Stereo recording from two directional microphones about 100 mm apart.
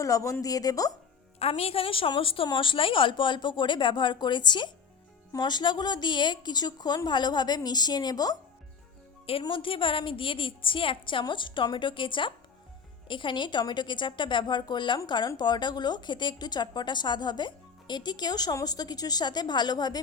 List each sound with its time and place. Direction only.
0.0 s a woman's voice: 30° left (ahead or behind)
1.4 s speech: 80° left; by 8.4 s 40° left (ahead or behind)
9.4 s a woman's voice: 60° left (ahead or behind)